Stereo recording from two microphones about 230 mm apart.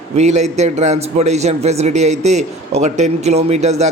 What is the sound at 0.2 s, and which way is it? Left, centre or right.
A man's voice, right.